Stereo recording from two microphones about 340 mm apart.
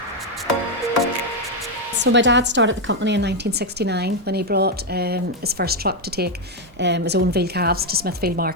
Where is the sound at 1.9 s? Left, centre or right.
Right.